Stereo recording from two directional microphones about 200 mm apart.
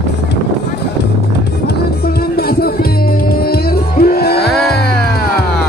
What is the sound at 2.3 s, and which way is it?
Music, 50° left (ahead or behind).